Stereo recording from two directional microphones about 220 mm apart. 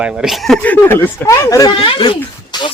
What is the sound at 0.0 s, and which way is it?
Speech, 5° right (ahead or behind).